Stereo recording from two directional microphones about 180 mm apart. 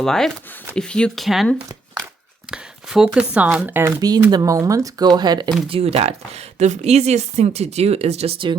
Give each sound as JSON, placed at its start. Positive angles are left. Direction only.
{"t": 0.0, "sound": "speech", "side_deg": 5}